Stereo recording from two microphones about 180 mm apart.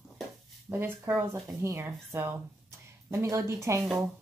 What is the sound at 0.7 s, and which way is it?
Speech, 10° right (ahead or behind).